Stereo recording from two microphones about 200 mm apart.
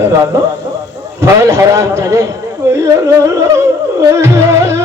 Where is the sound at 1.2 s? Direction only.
15° right (ahead or behind).